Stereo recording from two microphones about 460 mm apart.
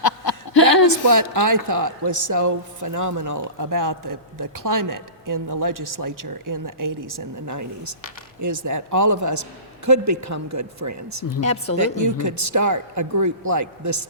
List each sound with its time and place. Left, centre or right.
0.0 s chuckle: left
0.9 s speech: right